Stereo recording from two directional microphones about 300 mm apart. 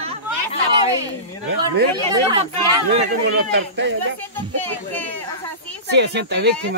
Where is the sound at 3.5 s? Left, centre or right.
Right.